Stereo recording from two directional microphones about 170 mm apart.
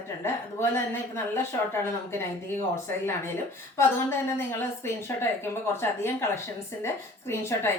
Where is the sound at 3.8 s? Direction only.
15° left (ahead or behind).